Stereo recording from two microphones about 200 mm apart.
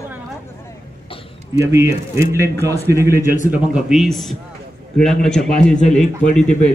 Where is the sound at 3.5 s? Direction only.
5° right (ahead or behind).